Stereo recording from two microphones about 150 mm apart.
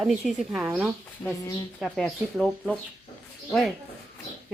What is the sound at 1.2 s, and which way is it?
Speech, 15° left (ahead or behind).